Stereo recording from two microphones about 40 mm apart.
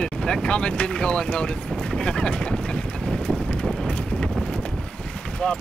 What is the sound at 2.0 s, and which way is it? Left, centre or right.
Speech, left.